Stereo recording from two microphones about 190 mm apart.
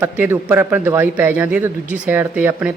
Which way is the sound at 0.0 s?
10° right (ahead or behind).